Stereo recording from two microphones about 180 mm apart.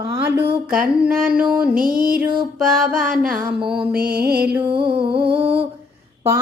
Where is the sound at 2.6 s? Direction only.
5° right (ahead or behind).